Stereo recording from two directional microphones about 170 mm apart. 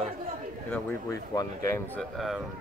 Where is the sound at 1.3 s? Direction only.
20° left (ahead or behind).